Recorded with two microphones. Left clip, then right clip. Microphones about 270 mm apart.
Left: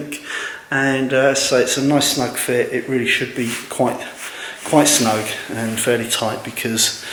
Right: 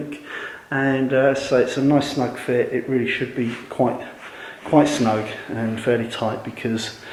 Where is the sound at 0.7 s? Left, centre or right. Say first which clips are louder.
Left 3 dB; centre.